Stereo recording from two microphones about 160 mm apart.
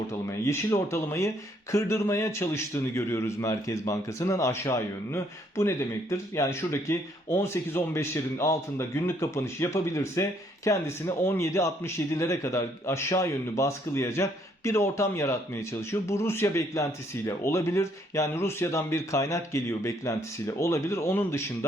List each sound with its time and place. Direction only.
0.1 s a man's voice: 15° left (ahead or behind)